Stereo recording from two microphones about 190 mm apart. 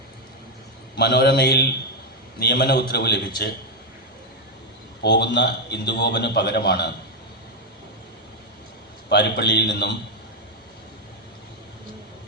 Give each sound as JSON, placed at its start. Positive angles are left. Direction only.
{"t": 0.9, "sound": "a man's voice", "side_deg": 60}
{"t": 5.0, "sound": "a man's voice", "side_deg": 65}
{"t": 9.0, "sound": "a man's voice", "side_deg": 60}